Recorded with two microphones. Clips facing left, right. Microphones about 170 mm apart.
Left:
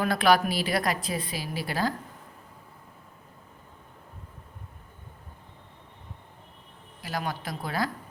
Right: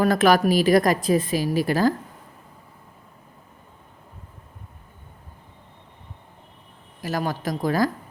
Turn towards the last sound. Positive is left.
turn(degrees=-40)  # may be behind; listen again after turning